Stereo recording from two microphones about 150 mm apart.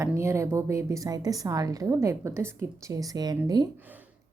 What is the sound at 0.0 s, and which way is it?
A woman's voice, 20° right (ahead or behind).